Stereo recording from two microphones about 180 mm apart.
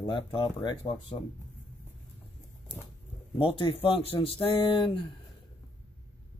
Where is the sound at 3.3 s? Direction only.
25° left (ahead or behind).